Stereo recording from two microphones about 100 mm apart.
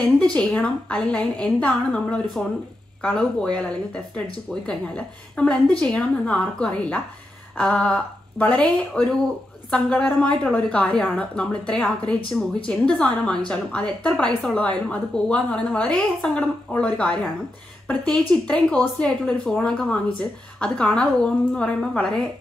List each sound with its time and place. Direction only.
0.0 s a woman's voice: 15° left (ahead or behind)